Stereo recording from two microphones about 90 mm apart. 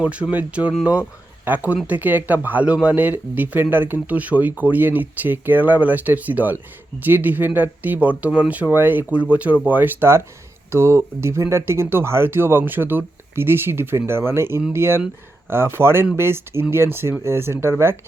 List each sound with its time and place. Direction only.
0.0 s speech: 15° right (ahead or behind); by 17.9 s 30° right (ahead or behind)